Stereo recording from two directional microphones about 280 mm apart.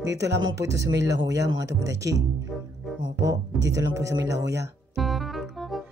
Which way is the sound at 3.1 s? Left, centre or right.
Right.